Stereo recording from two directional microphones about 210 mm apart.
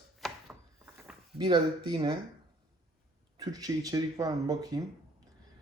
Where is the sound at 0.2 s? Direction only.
Centre (ahead or behind).